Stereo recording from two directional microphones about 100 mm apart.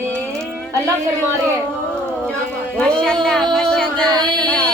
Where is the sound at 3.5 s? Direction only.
5° left (ahead or behind).